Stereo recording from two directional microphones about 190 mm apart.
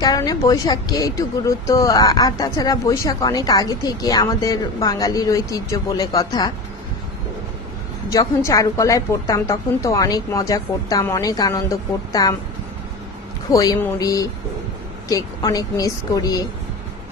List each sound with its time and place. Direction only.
0.0 s speech: 20° left (ahead or behind)
8.1 s a woman's voice: 15° left (ahead or behind)
13.5 s speech: 20° left (ahead or behind)